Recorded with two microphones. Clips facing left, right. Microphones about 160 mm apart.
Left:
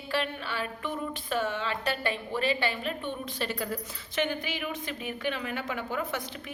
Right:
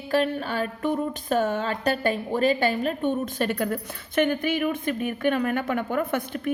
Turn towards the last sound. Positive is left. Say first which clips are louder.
# right 7 dB
turn(degrees=-55)  # may be behind; listen again after turning